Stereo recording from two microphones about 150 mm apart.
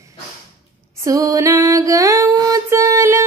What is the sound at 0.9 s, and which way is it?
Music, 20° right (ahead or behind).